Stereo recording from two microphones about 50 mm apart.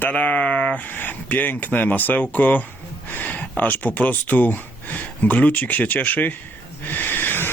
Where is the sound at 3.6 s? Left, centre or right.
Left.